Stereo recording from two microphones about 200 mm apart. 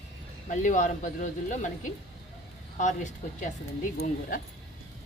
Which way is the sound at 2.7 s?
40° left (ahead or behind).